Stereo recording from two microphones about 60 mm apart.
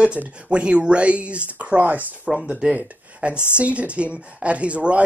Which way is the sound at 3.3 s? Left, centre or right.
Left.